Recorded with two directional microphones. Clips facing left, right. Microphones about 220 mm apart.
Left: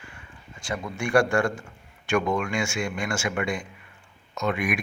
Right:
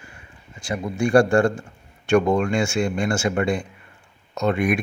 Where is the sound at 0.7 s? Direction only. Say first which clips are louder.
Right 5 dB; 30° right (ahead or behind).